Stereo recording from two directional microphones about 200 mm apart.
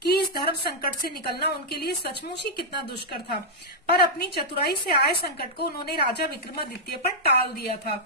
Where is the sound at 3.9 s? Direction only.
50° left (ahead or behind).